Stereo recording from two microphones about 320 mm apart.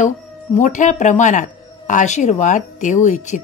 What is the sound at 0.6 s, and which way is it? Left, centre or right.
Speech, left.